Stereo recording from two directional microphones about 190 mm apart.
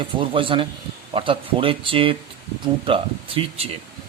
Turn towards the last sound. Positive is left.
turn(degrees=-30)  # may be behind; listen again after turning